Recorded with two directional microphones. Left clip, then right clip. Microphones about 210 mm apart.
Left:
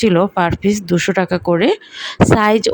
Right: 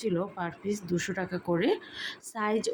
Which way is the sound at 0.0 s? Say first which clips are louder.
Left 18 dB; 45° left (ahead or behind).